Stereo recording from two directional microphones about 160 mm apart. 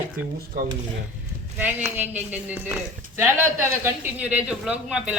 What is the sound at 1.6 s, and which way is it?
Speech, 10° right (ahead or behind).